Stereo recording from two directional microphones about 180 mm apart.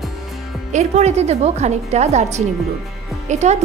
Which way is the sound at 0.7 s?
35° right (ahead or behind).